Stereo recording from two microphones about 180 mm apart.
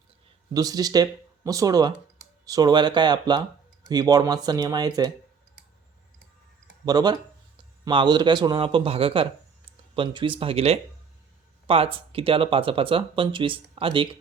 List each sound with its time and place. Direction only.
0.5 s speech: 20° right (ahead or behind)
6.8 s speech: 20° right (ahead or behind)